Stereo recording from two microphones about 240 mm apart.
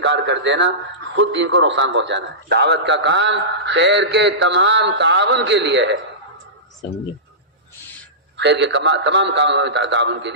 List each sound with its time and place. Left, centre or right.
0.0 s a sound: right
1.1 s a man's voice: right
8.4 s a man's voice: right